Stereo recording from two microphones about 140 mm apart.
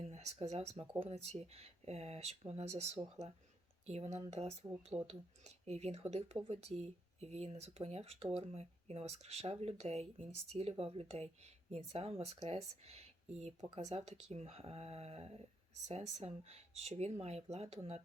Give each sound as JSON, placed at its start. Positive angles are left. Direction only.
{"t": 0.0, "sound": "speech", "side_deg": -45}